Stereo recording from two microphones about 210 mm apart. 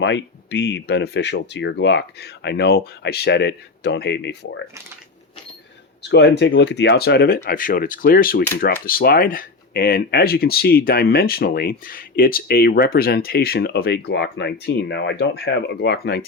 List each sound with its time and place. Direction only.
0.0 s speech: 55° left (ahead or behind)
6.0 s speech: 55° left (ahead or behind)